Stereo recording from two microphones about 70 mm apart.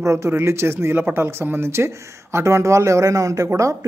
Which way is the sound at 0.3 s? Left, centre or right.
Right.